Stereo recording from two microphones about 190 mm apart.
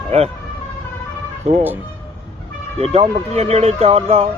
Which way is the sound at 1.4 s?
35° right (ahead or behind).